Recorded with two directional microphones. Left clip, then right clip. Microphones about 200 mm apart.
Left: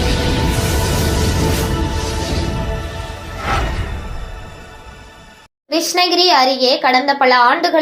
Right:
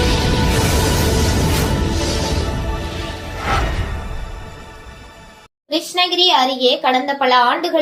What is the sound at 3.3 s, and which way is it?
Music, centre (ahead or behind).